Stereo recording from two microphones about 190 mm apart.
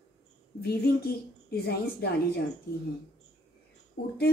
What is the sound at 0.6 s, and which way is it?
A woman's voice, 60° left (ahead or behind).